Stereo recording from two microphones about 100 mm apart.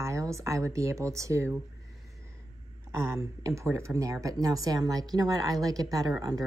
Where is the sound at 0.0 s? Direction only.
30° right (ahead or behind).